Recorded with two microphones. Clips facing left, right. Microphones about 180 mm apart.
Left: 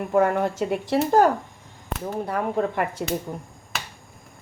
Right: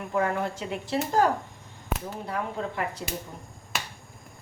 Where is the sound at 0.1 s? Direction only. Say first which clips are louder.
Left 6 dB; 55° left (ahead or behind).